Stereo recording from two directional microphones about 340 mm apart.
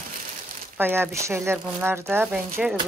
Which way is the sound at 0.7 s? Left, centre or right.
Centre.